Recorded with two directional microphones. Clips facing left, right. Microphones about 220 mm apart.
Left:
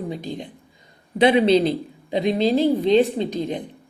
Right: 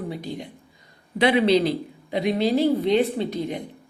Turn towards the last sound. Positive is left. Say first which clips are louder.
# left 2 dB
turn(degrees=15)  # may be behind; listen again after turning